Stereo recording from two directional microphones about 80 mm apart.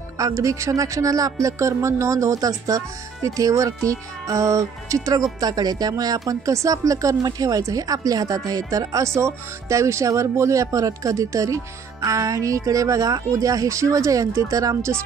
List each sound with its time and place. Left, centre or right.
0.2 s speech: right
5.4 s speech: right